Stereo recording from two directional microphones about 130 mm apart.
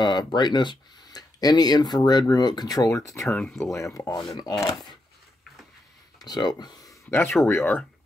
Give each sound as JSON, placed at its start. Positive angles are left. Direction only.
{"t": 0.0, "sound": "speech", "side_deg": 35}
{"t": 3.3, "sound": "speech", "side_deg": 0}
{"t": 3.7, "sound": "speech", "side_deg": 25}
{"t": 6.2, "sound": "speech", "side_deg": 30}
{"t": 7.1, "sound": "speech", "side_deg": 20}